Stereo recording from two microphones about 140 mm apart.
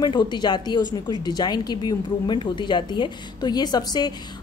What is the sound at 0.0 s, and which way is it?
A woman's voice, 35° left (ahead or behind).